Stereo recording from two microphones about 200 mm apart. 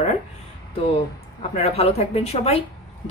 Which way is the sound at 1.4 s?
30° left (ahead or behind).